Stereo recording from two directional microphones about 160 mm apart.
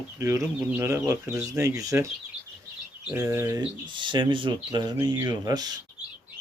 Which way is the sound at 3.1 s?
20° right (ahead or behind).